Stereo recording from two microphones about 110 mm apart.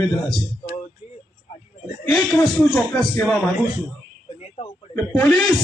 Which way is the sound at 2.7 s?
10° left (ahead or behind).